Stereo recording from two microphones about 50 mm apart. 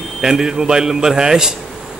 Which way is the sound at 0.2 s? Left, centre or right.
Centre.